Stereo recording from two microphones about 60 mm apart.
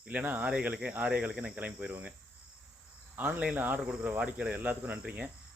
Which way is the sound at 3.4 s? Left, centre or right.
Centre.